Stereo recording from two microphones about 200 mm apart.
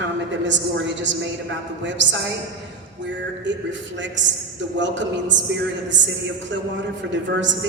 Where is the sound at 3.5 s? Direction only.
65° right (ahead or behind).